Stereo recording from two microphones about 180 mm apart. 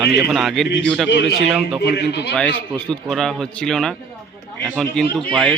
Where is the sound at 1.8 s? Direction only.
70° left (ahead or behind).